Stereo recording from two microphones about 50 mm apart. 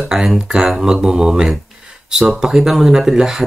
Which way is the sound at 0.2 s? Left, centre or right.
Centre.